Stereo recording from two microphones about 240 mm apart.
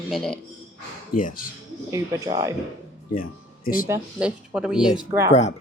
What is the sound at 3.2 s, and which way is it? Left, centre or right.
Speech, left.